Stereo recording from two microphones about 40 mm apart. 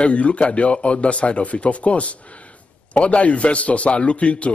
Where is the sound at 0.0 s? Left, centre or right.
Left.